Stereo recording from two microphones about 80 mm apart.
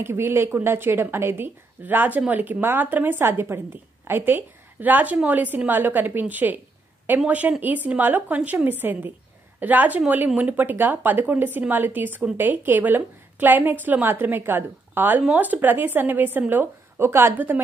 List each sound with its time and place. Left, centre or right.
0.0 s speech: right